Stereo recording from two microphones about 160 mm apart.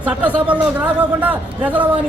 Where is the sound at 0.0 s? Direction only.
10° right (ahead or behind).